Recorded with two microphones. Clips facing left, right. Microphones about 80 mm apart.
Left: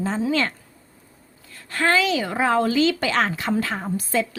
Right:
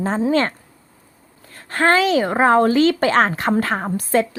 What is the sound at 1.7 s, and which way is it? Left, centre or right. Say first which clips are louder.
A woman's voice: right 5 dB; right.